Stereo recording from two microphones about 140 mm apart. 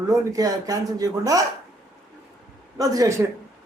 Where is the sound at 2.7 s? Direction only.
25° right (ahead or behind).